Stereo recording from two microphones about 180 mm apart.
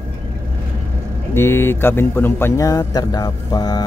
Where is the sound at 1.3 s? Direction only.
15° left (ahead or behind).